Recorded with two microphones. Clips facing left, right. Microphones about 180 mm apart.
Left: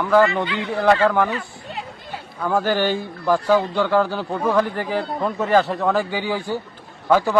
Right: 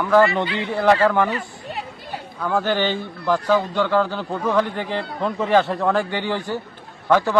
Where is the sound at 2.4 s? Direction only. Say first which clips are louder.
Left 1 dB; 5° left (ahead or behind).